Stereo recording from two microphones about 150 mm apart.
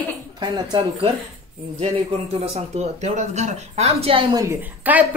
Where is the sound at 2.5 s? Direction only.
50° right (ahead or behind).